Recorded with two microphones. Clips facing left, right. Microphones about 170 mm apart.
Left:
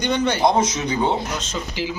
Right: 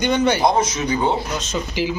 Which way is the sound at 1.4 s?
15° right (ahead or behind).